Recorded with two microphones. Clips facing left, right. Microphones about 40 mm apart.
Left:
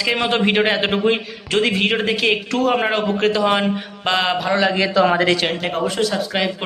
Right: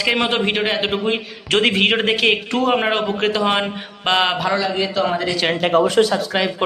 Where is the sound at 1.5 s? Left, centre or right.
Right.